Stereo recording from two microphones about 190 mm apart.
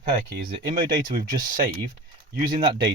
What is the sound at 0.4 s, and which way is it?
Speech, 45° right (ahead or behind).